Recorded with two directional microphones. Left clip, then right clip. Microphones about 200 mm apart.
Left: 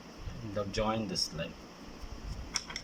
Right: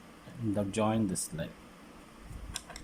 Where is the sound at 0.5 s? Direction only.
20° right (ahead or behind).